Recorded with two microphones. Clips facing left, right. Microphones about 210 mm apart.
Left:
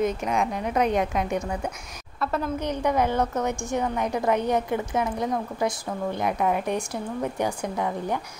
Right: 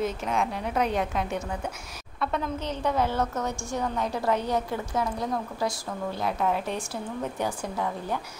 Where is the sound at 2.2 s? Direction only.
5° left (ahead or behind).